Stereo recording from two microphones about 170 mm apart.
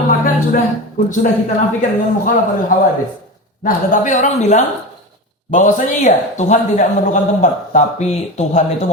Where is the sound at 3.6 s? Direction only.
50° left (ahead or behind).